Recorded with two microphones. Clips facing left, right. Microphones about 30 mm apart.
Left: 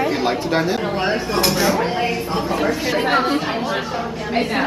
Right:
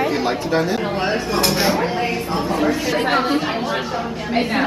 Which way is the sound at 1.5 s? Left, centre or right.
Right.